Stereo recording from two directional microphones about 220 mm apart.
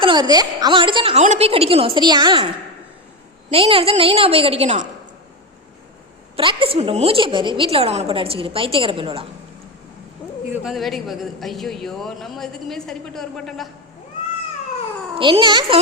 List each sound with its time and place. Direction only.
0.0 s a woman's voice: 20° right (ahead or behind)
3.5 s a woman's voice: 25° right (ahead or behind)
6.3 s a woman's voice: 25° right (ahead or behind)
10.5 s speech: centre (ahead or behind)
15.1 s a woman's voice: 25° right (ahead or behind)